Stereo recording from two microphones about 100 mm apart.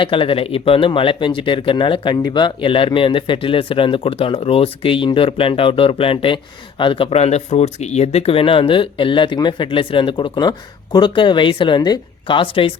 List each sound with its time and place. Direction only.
0.0 s speech: 60° left (ahead or behind)